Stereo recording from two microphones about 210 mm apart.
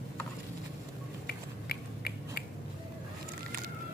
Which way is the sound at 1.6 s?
50° left (ahead or behind).